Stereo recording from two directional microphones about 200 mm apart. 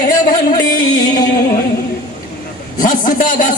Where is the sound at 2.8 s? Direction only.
40° left (ahead or behind).